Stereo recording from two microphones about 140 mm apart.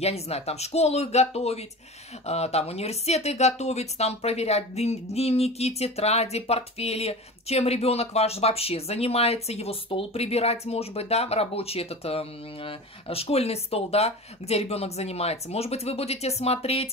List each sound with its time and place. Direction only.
0.0 s speech: 50° left (ahead or behind)